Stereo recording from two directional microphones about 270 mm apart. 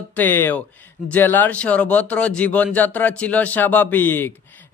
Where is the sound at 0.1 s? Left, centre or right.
Centre.